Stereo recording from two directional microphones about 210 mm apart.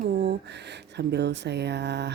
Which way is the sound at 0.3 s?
55° right (ahead or behind).